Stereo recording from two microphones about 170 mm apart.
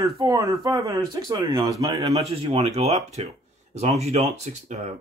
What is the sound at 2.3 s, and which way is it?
Speech, 35° right (ahead or behind).